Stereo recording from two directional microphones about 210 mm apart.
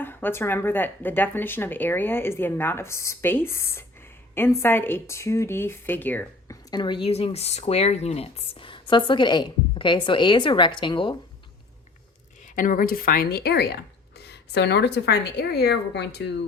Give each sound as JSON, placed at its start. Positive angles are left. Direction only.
{"t": 0.0, "sound": "a woman's voice", "side_deg": 10}
{"t": 12.5, "sound": "speech", "side_deg": 40}